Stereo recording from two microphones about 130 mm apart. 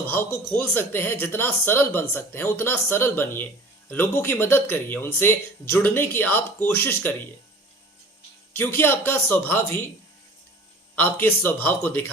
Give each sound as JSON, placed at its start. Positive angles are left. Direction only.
{"t": 0.0, "sound": "speech", "side_deg": 15}
{"t": 8.5, "sound": "speech", "side_deg": 15}
{"t": 10.9, "sound": "speech", "side_deg": 15}